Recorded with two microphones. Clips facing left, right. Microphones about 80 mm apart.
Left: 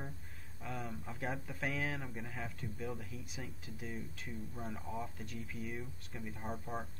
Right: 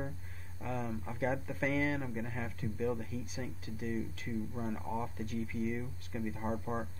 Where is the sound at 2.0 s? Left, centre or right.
Centre.